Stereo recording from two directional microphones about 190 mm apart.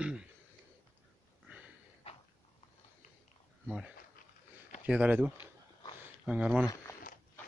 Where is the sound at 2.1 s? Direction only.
30° left (ahead or behind).